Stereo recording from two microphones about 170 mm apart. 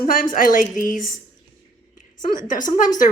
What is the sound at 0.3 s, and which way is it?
Speech, 55° left (ahead or behind).